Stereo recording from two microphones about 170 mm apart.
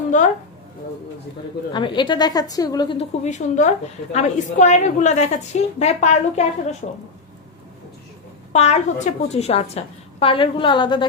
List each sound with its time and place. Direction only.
1.7 s a woman's voice: 25° left (ahead or behind)
3.0 s a woman's voice: 45° left (ahead or behind)
8.5 s a woman's voice: 40° left (ahead or behind)